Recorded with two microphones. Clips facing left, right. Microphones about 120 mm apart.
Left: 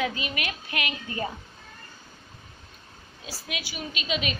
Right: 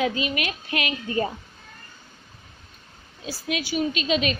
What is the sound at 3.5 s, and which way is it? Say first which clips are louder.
Speech: right 11 dB; 30° right (ahead or behind).